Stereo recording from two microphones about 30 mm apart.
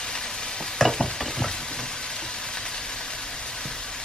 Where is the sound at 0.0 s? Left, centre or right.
Left.